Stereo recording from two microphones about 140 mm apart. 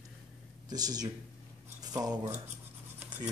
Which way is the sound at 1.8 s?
25° right (ahead or behind).